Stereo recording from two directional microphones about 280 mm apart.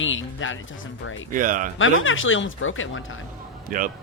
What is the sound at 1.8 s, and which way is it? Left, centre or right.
Speech, left.